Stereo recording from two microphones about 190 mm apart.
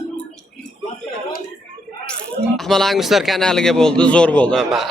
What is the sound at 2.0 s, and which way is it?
Speech, 5° left (ahead or behind).